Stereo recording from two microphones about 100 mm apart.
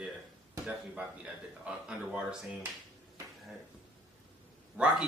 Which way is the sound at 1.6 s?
10° right (ahead or behind).